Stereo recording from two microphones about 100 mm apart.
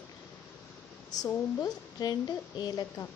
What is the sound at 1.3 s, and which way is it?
A woman's voice, 35° left (ahead or behind).